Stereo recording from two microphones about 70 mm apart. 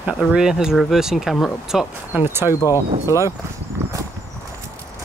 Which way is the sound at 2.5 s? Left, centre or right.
Left.